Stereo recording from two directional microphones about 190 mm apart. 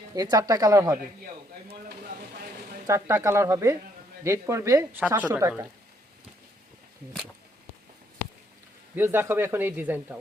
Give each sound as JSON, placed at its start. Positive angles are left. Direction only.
{"t": 0.1, "sound": "speech", "side_deg": -20}
{"t": 2.8, "sound": "speech", "side_deg": -15}
{"t": 9.0, "sound": "speech", "side_deg": -10}